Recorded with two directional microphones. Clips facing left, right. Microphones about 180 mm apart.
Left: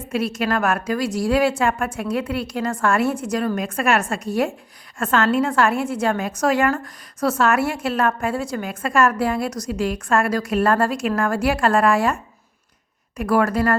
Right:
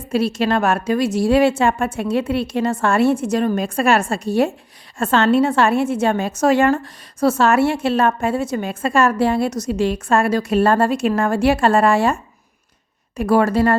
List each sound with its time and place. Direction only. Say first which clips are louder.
0.1 s a woman's voice: right 4 dB; 30° right (ahead or behind)